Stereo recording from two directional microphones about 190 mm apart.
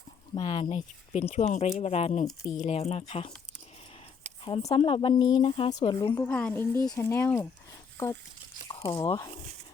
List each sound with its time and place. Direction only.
0.3 s speech: 25° left (ahead or behind)
4.4 s a woman's voice: 30° left (ahead or behind); by 8.2 s 15° left (ahead or behind)
8.6 s speech: 30° left (ahead or behind)